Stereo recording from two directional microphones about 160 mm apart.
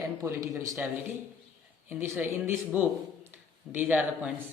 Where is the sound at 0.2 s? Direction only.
20° right (ahead or behind).